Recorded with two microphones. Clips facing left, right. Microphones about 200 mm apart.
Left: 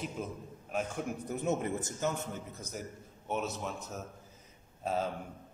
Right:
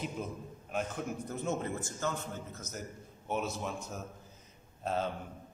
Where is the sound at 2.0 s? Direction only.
15° left (ahead or behind).